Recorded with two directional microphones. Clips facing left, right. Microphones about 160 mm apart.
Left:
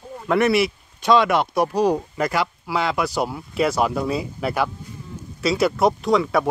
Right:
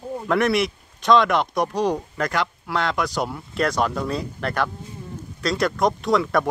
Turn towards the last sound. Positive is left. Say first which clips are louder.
# left 1 dB
turn(degrees=0)  # may be behind; listen again after turning